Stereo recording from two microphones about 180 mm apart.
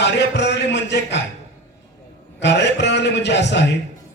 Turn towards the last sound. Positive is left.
turn(degrees=75)  # may be behind; listen again after turning